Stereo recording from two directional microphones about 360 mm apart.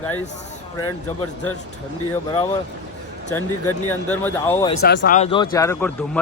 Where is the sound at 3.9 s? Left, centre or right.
Centre.